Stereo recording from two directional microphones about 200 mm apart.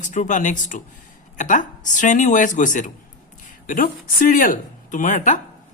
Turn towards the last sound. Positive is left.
turn(degrees=40)  # may be behind; listen again after turning